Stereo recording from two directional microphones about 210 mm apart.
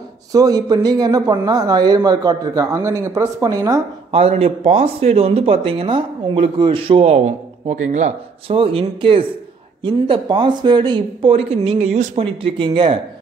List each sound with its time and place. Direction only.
0.3 s speech: 15° right (ahead or behind)
4.1 s speech: 30° right (ahead or behind)